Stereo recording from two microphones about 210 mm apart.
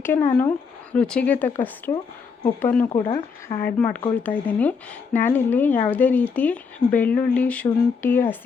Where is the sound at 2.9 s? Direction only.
20° left (ahead or behind).